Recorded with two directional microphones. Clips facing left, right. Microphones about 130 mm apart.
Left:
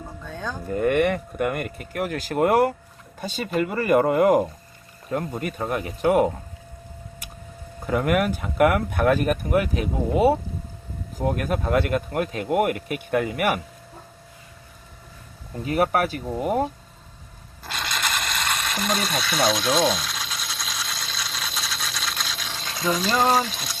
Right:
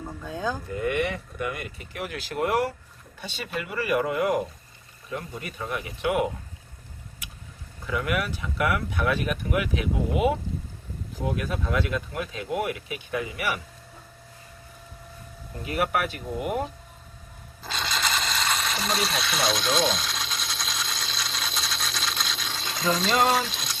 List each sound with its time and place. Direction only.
0.3 s speech: 5° right (ahead or behind)
0.7 s speech: 50° left (ahead or behind)
7.2 s vehicle: 40° left (ahead or behind)
7.8 s speech: 45° left (ahead or behind)
11.2 s speech: 50° left (ahead or behind)
15.6 s speech: 40° left (ahead or behind)
17.6 s ratchet: centre (ahead or behind)